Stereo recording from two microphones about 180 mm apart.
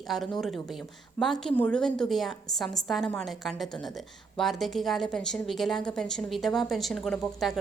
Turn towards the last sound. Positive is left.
turn(degrees=0)  # may be behind; listen again after turning